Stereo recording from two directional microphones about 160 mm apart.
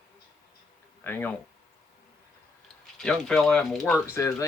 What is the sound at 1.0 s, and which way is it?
Speech, 10° left (ahead or behind).